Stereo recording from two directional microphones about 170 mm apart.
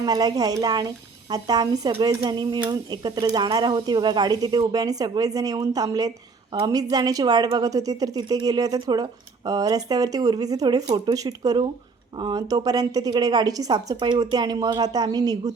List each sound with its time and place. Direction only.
0.0 s speech: 25° right (ahead or behind)